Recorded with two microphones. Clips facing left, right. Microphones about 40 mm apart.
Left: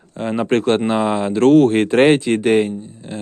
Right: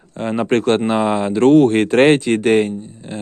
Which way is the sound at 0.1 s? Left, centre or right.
Right.